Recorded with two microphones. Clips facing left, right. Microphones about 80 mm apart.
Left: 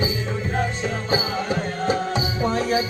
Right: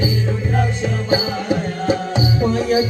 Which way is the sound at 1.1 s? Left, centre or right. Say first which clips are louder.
Right 5 dB; left.